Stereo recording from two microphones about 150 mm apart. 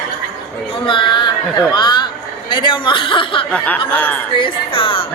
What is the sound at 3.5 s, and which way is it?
Snicker, 10° left (ahead or behind).